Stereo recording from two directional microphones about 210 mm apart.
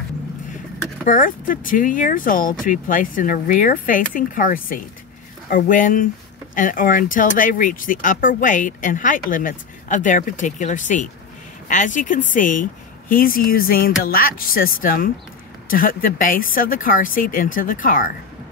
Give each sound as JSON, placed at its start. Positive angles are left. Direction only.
{"t": 1.0, "sound": "speech", "side_deg": 40}